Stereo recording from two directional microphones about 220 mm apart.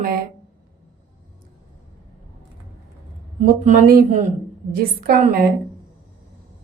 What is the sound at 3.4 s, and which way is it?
A woman's voice, 35° right (ahead or behind).